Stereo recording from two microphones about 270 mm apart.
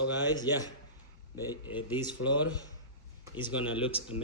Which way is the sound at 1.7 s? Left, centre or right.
Centre.